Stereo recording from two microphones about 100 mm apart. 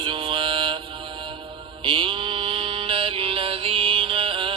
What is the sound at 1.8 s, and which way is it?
Mantra, 55° right (ahead or behind).